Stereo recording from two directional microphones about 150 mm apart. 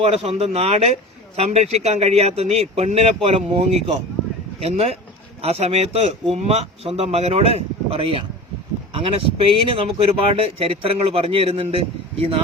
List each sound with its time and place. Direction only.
0.0 s speech: 45° right (ahead or behind)